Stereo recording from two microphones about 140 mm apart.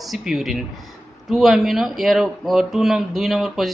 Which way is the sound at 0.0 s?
Centre (ahead or behind).